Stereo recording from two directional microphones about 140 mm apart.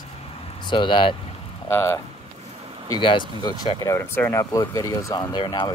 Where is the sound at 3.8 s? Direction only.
20° left (ahead or behind).